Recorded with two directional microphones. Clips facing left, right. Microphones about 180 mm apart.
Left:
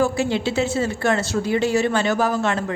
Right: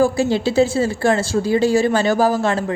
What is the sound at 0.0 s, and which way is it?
A woman's voice, 35° right (ahead or behind).